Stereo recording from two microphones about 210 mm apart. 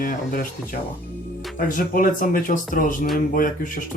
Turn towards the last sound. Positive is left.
turn(degrees=40)  # may be behind; listen again after turning